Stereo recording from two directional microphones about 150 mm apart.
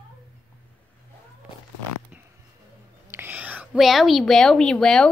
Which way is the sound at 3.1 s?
15° right (ahead or behind).